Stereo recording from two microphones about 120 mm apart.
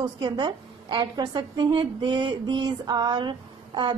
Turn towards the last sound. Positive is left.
turn(degrees=-40)  # may be behind; listen again after turning